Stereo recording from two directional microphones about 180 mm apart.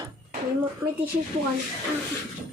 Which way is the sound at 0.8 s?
20° right (ahead or behind).